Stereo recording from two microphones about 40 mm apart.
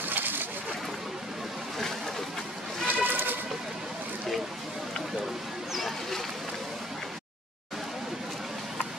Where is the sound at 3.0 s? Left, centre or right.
Right.